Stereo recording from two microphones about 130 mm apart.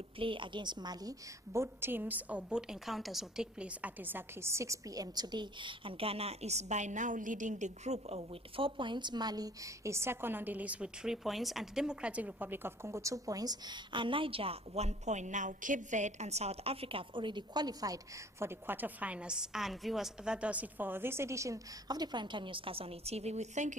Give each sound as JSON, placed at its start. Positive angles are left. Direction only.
{"t": 0.2, "sound": "a woman's voice", "side_deg": -40}